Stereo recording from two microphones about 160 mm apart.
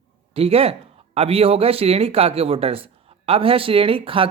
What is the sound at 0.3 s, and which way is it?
Speech, 40° right (ahead or behind).